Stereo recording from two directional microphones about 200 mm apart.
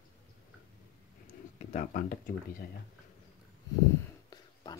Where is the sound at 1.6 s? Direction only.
35° left (ahead or behind).